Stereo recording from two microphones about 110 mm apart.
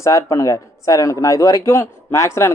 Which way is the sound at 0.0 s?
30° left (ahead or behind).